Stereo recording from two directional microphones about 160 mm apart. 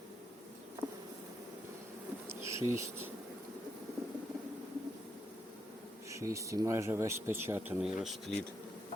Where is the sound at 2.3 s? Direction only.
20° right (ahead or behind).